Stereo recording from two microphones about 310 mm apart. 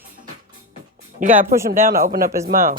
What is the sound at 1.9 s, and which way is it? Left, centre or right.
Speech, right.